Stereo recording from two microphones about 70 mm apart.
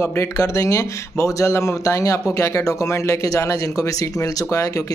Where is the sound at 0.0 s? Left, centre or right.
Left.